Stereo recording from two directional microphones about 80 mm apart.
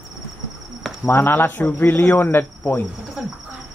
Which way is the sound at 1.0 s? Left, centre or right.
Left.